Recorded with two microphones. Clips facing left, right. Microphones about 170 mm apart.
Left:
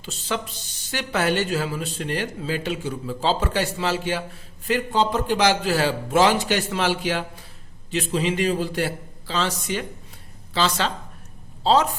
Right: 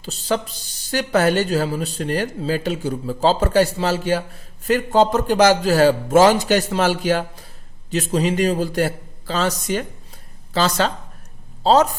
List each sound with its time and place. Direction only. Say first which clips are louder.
0.0 s a man's voice: right 6 dB; 35° right (ahead or behind)